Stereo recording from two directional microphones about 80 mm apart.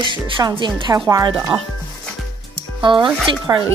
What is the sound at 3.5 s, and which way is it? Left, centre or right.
Speech, right.